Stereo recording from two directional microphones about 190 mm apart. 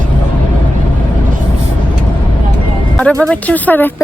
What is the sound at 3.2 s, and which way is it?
Speech, 5° left (ahead or behind).